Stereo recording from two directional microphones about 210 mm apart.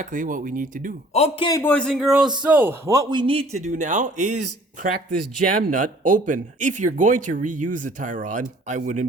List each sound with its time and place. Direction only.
0.0 s speech: 40° right (ahead or behind)
1.1 s a man's voice: 30° left (ahead or behind)
1.5 s speech: 10° left (ahead or behind); by 4.4 s 35° right (ahead or behind)
5.5 s speech: 40° right (ahead or behind)